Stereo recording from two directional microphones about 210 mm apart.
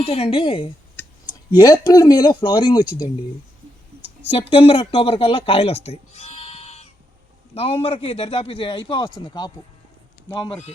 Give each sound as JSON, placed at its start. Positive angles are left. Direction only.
{"t": 0.0, "sound": "a man's voice", "side_deg": 30}
{"t": 4.0, "sound": "a man's voice", "side_deg": 30}